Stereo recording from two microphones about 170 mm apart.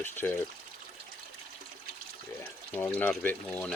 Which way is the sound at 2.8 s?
10° left (ahead or behind).